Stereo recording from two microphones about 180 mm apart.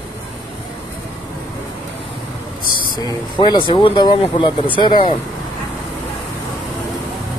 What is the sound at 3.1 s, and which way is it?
Speech, 25° left (ahead or behind).